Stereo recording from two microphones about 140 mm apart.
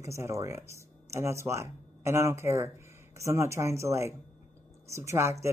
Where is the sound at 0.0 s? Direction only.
20° right (ahead or behind).